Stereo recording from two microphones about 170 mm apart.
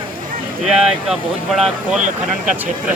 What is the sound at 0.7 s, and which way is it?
Speech, centre (ahead or behind).